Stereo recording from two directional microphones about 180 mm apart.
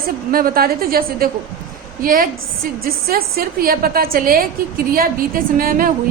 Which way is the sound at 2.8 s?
55° right (ahead or behind).